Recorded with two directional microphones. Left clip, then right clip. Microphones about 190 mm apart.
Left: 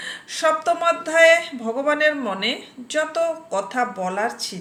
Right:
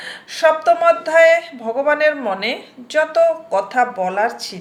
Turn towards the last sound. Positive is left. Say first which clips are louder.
# right 5 dB
turn(degrees=15)  # may be behind; listen again after turning